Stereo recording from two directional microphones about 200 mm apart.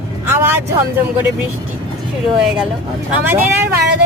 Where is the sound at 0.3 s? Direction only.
10° right (ahead or behind).